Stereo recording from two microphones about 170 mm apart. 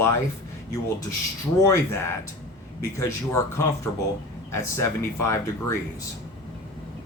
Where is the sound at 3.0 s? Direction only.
15° left (ahead or behind).